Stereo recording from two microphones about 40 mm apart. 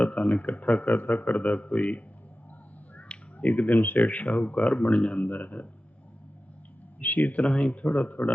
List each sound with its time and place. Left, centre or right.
0.0 s a man's voice: left
3.1 s finger snapping: left
3.4 s a man's voice: left
7.0 s a man's voice: left